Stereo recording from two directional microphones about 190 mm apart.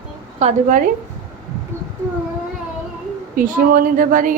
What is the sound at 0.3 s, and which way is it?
Speech, 40° right (ahead or behind).